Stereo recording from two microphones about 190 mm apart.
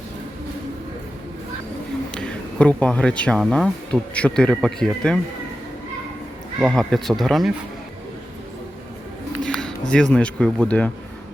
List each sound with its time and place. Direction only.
2.1 s speech: 5° left (ahead or behind)
6.6 s speech: centre (ahead or behind)
9.4 s speech: 5° left (ahead or behind)